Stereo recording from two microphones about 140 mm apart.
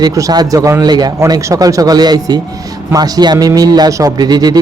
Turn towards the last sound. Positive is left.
turn(degrees=-30)  # may be behind; listen again after turning